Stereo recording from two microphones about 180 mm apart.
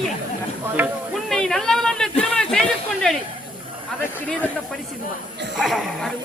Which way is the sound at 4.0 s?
10° left (ahead or behind).